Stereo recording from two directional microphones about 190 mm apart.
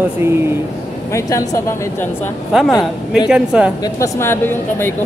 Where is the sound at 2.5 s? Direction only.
5° right (ahead or behind).